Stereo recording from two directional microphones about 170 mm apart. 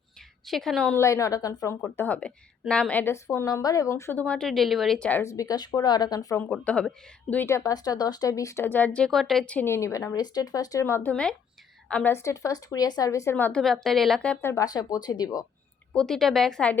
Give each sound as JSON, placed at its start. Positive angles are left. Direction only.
{"t": 0.4, "sound": "speech", "side_deg": 0}
{"t": 0.9, "sound": "speech", "side_deg": 15}
{"t": 6.4, "sound": "speech", "side_deg": 5}
{"t": 11.1, "sound": "speech", "side_deg": 5}
{"t": 14.5, "sound": "speech", "side_deg": 20}
{"t": 15.9, "sound": "speech", "side_deg": 5}